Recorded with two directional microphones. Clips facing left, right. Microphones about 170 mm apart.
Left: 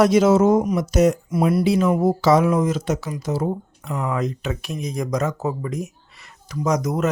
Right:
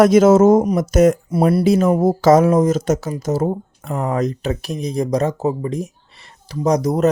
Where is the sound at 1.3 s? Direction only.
35° right (ahead or behind).